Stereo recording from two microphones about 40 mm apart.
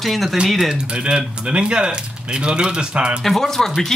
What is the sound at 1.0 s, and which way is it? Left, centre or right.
Speech, right.